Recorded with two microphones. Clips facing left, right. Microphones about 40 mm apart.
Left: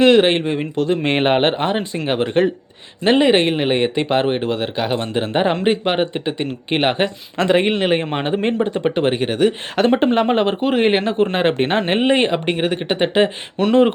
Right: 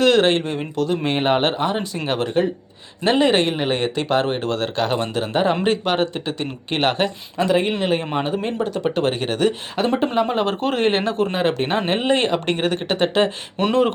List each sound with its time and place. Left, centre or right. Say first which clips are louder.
0.0 s speech: left 3 dB; left
2.0 s speech: left 4 dB; centre
5.1 s speech: left 4 dB; left
7.4 s speech: left 3 dB; left
8.5 s speech: left 3 dB; left
9.8 s speech: left 5 dB; left
10.2 s speech: left 3 dB; left
10.6 s speech: left 3 dB; centre
11.2 s speech: left 3 dB; left
13.6 s speech: left 3 dB; centre